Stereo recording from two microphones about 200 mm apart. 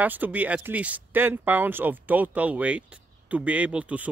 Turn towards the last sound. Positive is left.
turn(degrees=-5)  # may be behind; listen again after turning